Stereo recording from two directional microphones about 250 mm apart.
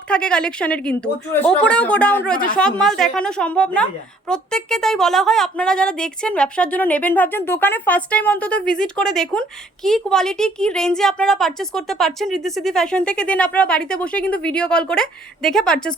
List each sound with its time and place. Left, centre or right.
0.1 s speech: centre